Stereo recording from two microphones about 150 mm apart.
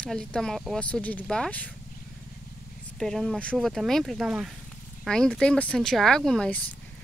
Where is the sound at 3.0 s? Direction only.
Centre (ahead or behind).